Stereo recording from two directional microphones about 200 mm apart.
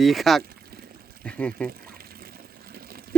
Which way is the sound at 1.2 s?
5° left (ahead or behind).